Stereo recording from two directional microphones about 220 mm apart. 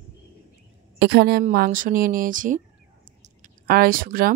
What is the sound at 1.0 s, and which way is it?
A woman's voice, 50° right (ahead or behind).